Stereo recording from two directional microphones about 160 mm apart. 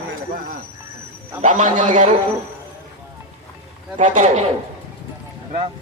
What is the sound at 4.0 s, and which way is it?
Speech, 50° right (ahead or behind).